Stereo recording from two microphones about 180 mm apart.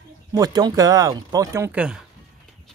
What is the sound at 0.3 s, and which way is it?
Speech, 20° right (ahead or behind).